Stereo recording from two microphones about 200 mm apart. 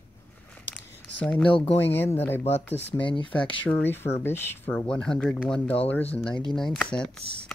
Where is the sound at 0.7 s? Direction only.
5° left (ahead or behind).